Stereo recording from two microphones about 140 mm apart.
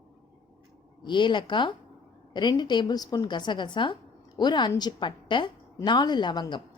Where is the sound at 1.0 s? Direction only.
35° left (ahead or behind).